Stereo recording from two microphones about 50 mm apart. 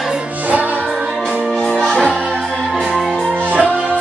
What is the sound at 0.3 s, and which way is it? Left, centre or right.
Music, right.